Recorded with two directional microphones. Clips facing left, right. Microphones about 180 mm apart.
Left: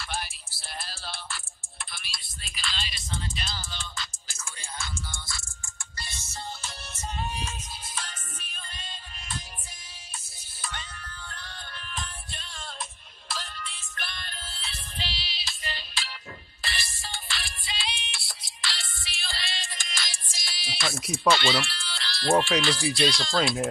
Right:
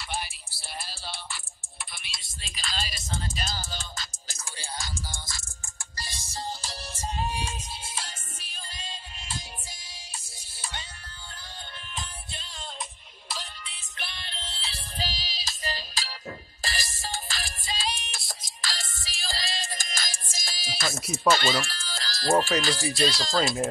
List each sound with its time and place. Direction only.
0.0 s music: 15° right (ahead or behind)
2.4 s music: 35° right (ahead or behind)
21.3 s speech: 40° right (ahead or behind)